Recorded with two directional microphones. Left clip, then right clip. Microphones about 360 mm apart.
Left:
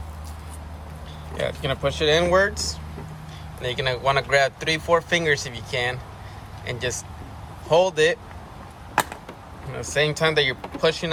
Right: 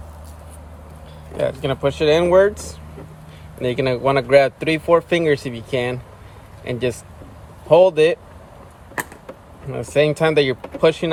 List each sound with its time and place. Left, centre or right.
1.4 s speech: centre
9.9 s speech: centre